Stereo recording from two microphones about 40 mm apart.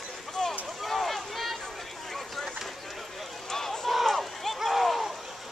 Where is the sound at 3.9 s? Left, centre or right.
Centre.